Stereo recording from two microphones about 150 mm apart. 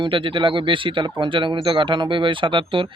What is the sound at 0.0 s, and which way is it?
Speech, 35° right (ahead or behind).